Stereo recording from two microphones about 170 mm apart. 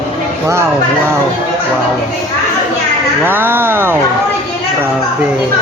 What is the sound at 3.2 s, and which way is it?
Speech, 10° right (ahead or behind).